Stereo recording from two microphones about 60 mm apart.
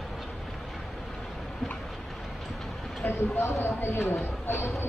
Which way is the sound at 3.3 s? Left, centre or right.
Left.